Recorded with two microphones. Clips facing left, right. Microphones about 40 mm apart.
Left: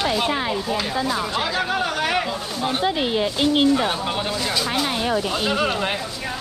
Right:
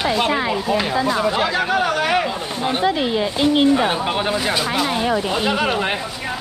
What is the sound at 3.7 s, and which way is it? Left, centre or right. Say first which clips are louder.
Speech: right 4 dB; right.